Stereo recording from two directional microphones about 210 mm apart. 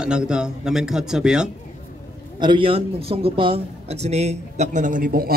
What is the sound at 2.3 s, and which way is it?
Speech, 20° right (ahead or behind).